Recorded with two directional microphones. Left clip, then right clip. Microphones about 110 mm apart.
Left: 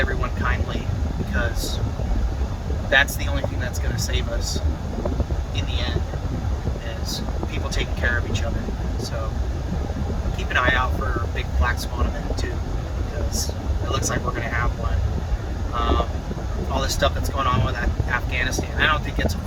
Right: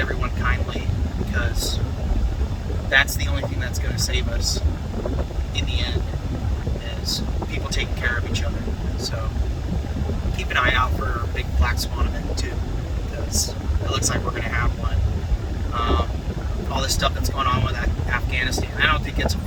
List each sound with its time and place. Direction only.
0.2 s vehicle: 15° right (ahead or behind)
2.9 s speech: 10° right (ahead or behind)
7.7 s speech: 15° right (ahead or behind)
10.5 s speech: 20° right (ahead or behind)
13.9 s speech: 25° right (ahead or behind)
15.7 s speech: 20° right (ahead or behind)